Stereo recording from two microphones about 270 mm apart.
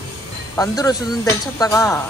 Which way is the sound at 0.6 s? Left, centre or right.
Centre.